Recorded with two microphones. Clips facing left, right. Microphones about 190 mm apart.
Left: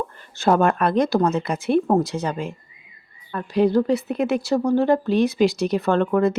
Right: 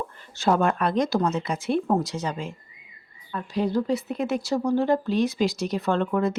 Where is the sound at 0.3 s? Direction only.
55° left (ahead or behind).